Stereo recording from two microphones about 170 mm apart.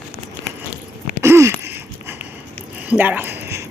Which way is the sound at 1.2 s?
15° right (ahead or behind).